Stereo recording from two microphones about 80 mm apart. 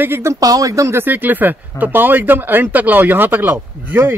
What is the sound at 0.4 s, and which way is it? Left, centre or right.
Speech, right.